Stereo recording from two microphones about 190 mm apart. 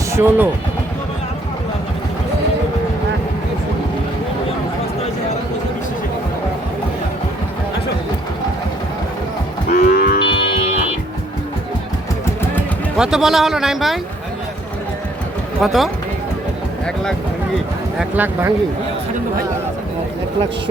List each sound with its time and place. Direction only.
0.1 s speech: 10° right (ahead or behind)
9.7 s moo: 50° left (ahead or behind)
13.0 s a man's voice: 5° right (ahead or behind)
15.6 s a man's voice: centre (ahead or behind)
17.9 s speech: 10° right (ahead or behind)